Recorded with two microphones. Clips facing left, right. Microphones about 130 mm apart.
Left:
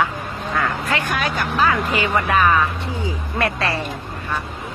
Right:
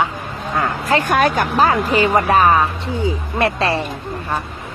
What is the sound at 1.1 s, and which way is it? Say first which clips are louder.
Speech: right 7 dB; 50° right (ahead or behind).